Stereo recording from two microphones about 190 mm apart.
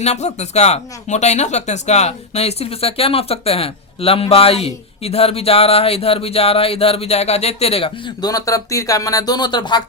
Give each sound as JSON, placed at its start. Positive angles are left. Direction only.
{"t": 0.0, "sound": "speech", "side_deg": 35}